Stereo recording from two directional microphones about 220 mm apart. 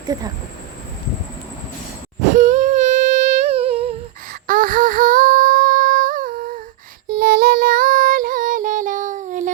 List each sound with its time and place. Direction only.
0.1 s speech: 15° right (ahead or behind)
2.3 s humming: 35° right (ahead or behind)
4.4 s humming: 40° right (ahead or behind)
7.1 s music: 45° right (ahead or behind)